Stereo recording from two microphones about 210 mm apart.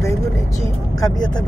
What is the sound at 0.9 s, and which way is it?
Speech, 20° left (ahead or behind).